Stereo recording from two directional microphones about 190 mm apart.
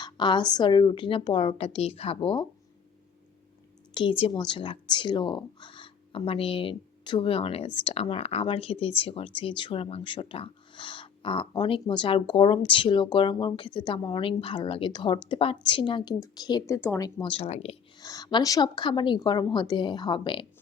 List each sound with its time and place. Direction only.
0.0 s speech: 25° left (ahead or behind)
3.9 s speech: 25° left (ahead or behind)
18.0 s speech: 20° left (ahead or behind)